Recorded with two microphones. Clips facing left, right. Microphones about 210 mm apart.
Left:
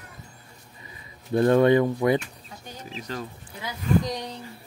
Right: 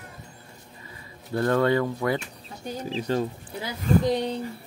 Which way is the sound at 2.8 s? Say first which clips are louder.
Right 8 dB; 30° right (ahead or behind).